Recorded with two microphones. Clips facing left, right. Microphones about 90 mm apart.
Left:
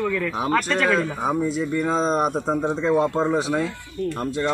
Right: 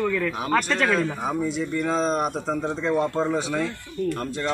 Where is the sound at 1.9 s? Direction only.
35° left (ahead or behind).